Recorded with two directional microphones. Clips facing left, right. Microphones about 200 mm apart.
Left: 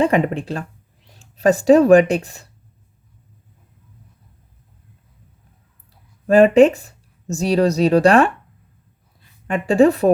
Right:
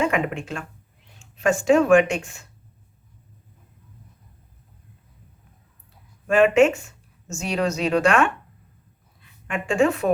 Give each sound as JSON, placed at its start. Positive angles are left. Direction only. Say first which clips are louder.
{"t": 0.0, "sound": "speech", "louder": "left 6 dB", "side_deg": 35}
{"t": 6.2, "sound": "a woman's voice", "louder": "left 5 dB", "side_deg": 35}